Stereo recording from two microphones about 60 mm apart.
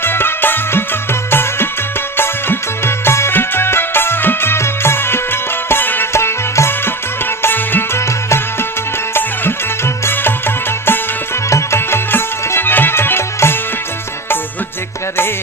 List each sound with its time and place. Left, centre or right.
0.0 s music: left
6.1 s music: left
9.1 s music: left
11.4 s music: left